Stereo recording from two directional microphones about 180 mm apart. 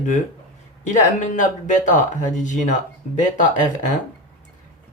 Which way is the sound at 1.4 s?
45° left (ahead or behind).